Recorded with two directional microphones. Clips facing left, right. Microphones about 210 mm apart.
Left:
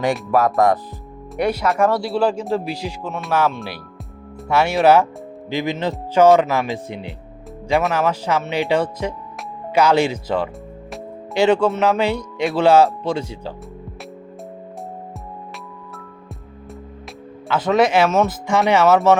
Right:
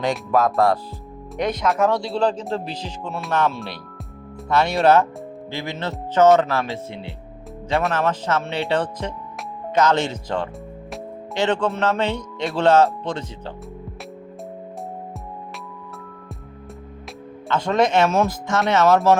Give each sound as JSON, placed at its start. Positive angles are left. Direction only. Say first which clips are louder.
{"t": 0.0, "sound": "speech", "louder": "left 2 dB", "side_deg": 15}
{"t": 7.8, "sound": "speech", "louder": "left 1 dB", "side_deg": 5}
{"t": 17.5, "sound": "speech", "louder": "left 3 dB", "side_deg": 5}